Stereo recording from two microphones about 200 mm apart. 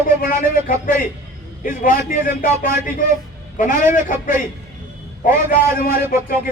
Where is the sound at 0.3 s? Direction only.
40° left (ahead or behind).